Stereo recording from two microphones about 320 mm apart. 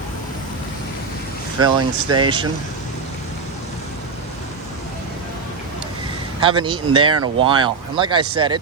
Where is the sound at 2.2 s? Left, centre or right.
Centre.